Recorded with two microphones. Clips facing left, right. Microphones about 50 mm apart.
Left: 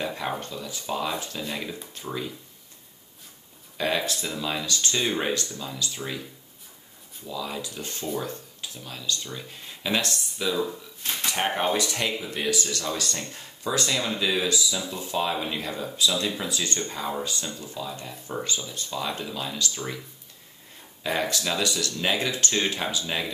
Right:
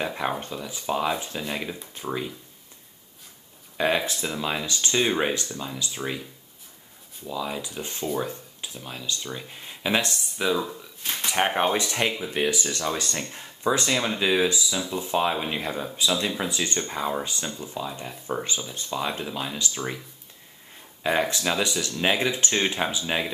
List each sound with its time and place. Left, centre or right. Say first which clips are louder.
0.0 s speech: right 2 dB; right
3.7 s speech: right 2 dB; right
7.2 s speech: right 2 dB; centre
21.1 s speech: right 3 dB; right